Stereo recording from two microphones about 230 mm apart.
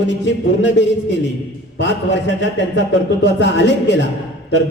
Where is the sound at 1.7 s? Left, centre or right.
Left.